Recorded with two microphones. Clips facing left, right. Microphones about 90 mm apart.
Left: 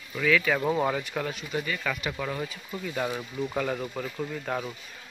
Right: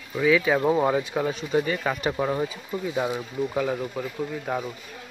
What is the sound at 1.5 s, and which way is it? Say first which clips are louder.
Speech: right 7 dB; 35° right (ahead or behind).